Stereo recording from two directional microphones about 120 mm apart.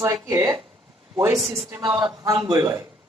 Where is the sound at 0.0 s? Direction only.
30° right (ahead or behind).